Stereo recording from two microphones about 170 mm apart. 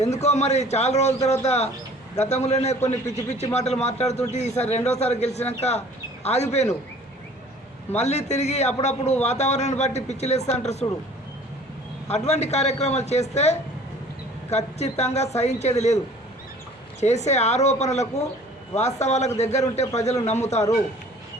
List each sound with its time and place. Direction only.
0.0 s a man's voice: 40° left (ahead or behind)
7.9 s a man's voice: 40° left (ahead or behind)
12.0 s a man's voice: 40° left (ahead or behind)
17.0 s a man's voice: 40° left (ahead or behind)